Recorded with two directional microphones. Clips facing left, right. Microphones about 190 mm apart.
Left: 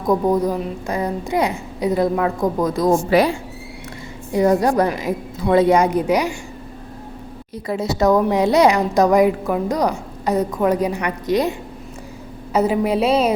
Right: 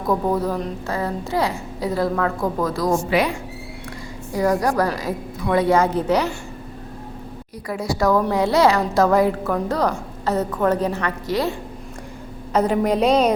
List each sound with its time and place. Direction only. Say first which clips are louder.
0.0 s a woman's voice: left 3 dB; 15° left (ahead or behind)
3.1 s speech: left 4 dB; 40° left (ahead or behind)
4.3 s a woman's voice: left 4 dB; 20° left (ahead or behind)
7.7 s a woman's voice: left 3 dB; 25° left (ahead or behind)
12.5 s a woman's voice: left 1 dB; 5° left (ahead or behind)